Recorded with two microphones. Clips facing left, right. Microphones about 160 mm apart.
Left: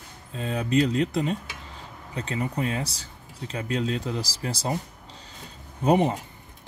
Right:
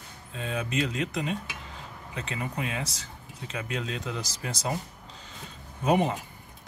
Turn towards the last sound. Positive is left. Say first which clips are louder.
# left 3 dB
turn(degrees=30)  # may be behind; listen again after turning